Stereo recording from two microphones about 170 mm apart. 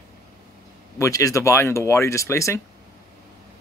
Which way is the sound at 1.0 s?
20° left (ahead or behind).